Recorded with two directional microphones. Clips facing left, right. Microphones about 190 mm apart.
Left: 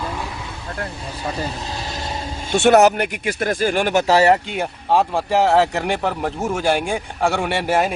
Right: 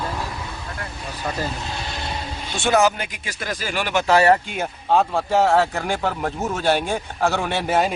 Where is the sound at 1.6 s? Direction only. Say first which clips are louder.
Left 2 dB; 35° left (ahead or behind).